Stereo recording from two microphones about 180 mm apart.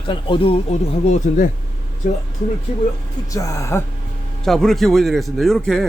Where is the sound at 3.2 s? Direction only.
20° left (ahead or behind).